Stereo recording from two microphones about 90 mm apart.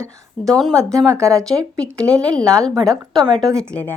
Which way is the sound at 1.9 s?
10° left (ahead or behind).